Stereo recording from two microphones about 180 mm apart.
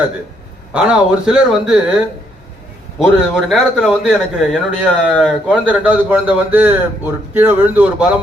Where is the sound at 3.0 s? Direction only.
5° right (ahead or behind).